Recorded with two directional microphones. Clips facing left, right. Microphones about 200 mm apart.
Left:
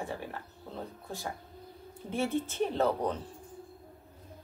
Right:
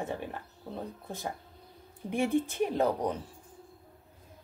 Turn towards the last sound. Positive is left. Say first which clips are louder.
# right 1 dB
turn(degrees=-10)  # may be behind; listen again after turning